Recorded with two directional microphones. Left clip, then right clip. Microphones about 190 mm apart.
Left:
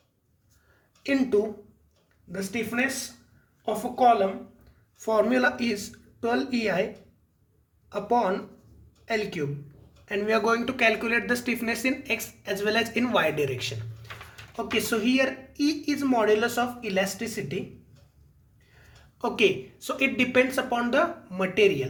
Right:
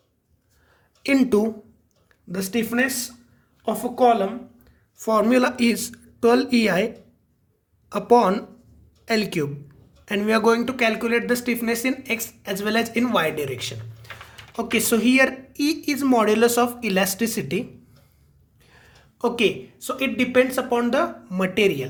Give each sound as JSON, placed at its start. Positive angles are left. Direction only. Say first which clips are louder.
{"t": 1.0, "sound": "speech", "louder": "right 5 dB", "side_deg": -40}
{"t": 7.9, "sound": "speech", "louder": "right 7 dB", "side_deg": -45}
{"t": 19.2, "sound": "speech", "louder": "right 2 dB", "side_deg": -25}